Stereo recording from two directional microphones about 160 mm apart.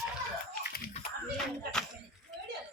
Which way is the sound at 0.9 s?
40° left (ahead or behind).